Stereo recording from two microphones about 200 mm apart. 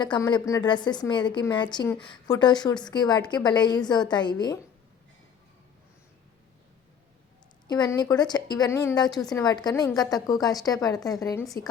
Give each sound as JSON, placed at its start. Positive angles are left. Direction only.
{"t": 0.0, "sound": "speech", "side_deg": 20}
{"t": 7.7, "sound": "speech", "side_deg": 20}